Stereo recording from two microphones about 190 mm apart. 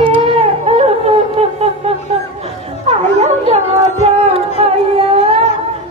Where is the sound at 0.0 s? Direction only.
30° right (ahead or behind).